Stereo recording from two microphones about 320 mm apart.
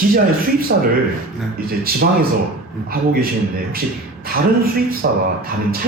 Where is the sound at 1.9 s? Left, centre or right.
Right.